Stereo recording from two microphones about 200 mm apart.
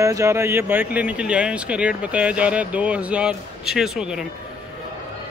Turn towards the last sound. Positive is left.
turn(degrees=-5)  # may be behind; listen again after turning